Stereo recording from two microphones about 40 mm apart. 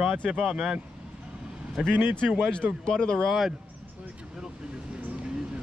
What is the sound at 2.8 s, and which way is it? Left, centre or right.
Speech, centre.